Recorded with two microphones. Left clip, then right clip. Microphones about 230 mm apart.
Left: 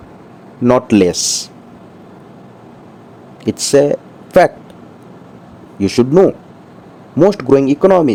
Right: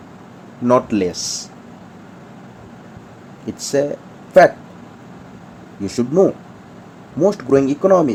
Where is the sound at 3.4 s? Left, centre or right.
Left.